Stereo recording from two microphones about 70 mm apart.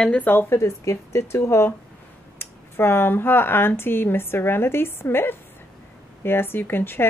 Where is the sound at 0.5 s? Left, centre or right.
Left.